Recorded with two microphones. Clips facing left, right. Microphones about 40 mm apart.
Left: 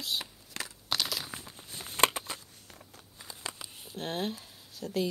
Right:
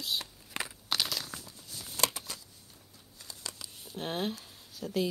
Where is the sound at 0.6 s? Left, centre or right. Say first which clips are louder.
Right 3 dB; right.